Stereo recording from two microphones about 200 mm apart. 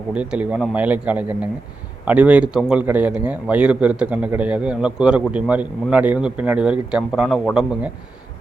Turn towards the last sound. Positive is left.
turn(degrees=-5)  # may be behind; listen again after turning